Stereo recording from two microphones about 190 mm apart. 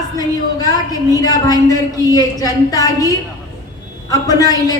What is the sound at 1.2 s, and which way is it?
A woman's voice, 20° left (ahead or behind).